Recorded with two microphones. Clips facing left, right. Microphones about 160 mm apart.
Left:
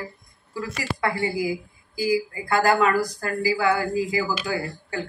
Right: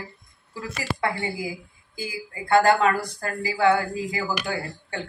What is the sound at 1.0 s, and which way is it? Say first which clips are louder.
Speech: left 3 dB; 20° right (ahead or behind).